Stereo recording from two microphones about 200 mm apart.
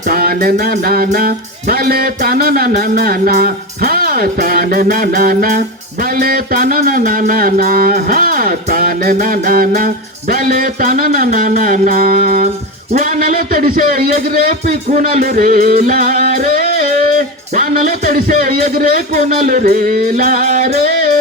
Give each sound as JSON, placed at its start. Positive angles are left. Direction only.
{"t": 0.1, "sound": "music", "side_deg": -50}